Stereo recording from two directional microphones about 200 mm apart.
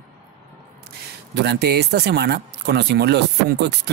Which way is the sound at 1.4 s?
55° right (ahead or behind).